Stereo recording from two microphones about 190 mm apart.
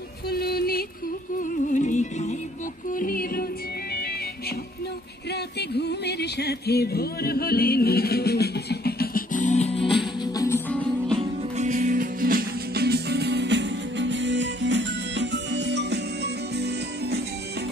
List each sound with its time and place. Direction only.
0.3 s music: 55° left (ahead or behind)
1.4 s music: 40° left (ahead or behind)
5.3 s music: 60° left (ahead or behind); by 9.8 s 35° left (ahead or behind)
10.2 s music: 15° left (ahead or behind)
11.5 s music: 40° right (ahead or behind); by 17.2 s 60° right (ahead or behind)